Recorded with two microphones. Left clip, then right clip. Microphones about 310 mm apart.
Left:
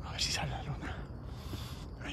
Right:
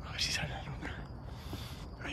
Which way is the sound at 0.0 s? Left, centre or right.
Centre.